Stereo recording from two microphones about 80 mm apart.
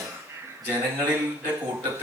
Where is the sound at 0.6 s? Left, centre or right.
Right.